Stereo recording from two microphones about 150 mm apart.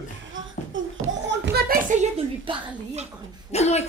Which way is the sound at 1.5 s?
75° right (ahead or behind).